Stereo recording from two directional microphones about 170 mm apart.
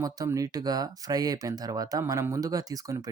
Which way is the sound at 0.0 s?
20° right (ahead or behind).